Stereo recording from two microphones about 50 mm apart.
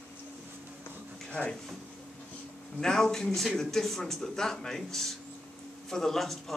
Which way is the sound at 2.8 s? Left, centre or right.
Centre.